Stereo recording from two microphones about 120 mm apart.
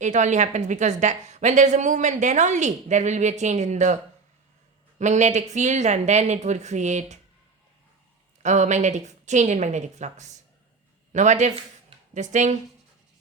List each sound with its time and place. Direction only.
0.0 s a woman's voice: 85° right
4.9 s speech: 80° right
8.4 s a woman's voice: 80° right